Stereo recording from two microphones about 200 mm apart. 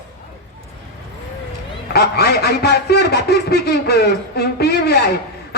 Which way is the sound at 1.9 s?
55° left (ahead or behind).